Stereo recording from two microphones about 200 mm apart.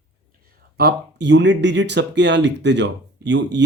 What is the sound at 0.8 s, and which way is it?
Speech, 55° right (ahead or behind).